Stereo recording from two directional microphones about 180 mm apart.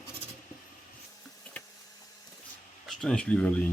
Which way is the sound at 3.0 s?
5° left (ahead or behind).